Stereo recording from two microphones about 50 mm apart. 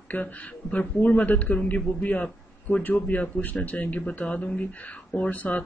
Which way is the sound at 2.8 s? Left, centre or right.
Left.